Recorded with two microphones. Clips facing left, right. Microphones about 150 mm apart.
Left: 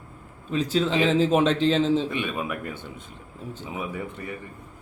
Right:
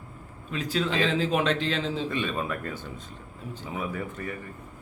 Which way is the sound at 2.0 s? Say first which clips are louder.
Left 1 dB; 15° left (ahead or behind).